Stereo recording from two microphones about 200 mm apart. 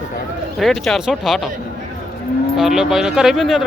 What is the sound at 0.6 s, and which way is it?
Speech, centre (ahead or behind).